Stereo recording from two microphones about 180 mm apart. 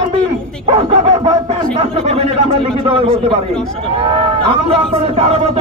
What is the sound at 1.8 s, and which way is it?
A man's voice, 35° right (ahead or behind).